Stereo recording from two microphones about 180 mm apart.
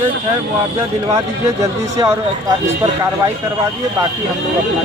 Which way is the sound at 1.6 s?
20° right (ahead or behind).